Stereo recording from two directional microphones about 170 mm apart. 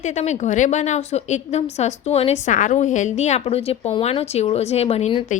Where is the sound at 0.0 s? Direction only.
45° left (ahead or behind).